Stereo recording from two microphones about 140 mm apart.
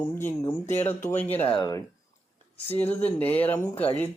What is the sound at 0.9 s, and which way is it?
Speech, 15° left (ahead or behind).